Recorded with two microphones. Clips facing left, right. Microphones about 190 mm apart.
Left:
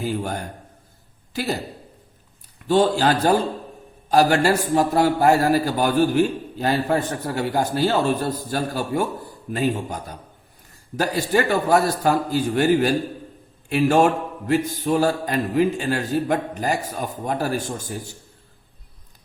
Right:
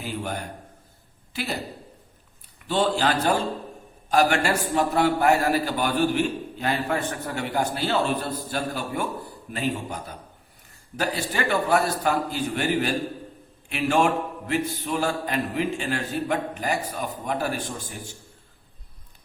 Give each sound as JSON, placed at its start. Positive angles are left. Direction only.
{"t": 0.0, "sound": "a man's voice", "side_deg": 40}
{"t": 2.6, "sound": "a man's voice", "side_deg": 40}